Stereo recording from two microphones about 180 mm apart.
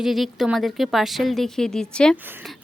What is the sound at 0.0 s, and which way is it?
Speech, centre (ahead or behind).